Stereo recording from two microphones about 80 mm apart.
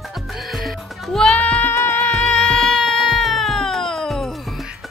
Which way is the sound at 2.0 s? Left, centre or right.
Centre.